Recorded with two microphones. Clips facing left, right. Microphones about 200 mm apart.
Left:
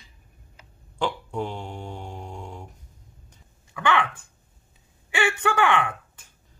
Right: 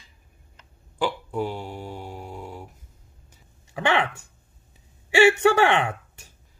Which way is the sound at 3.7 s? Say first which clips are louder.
Right 1 dB; 25° right (ahead or behind).